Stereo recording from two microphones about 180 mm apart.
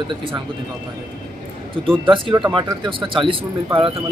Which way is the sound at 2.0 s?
30° right (ahead or behind).